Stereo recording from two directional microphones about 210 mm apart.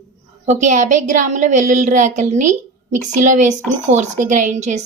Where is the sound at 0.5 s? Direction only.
35° right (ahead or behind).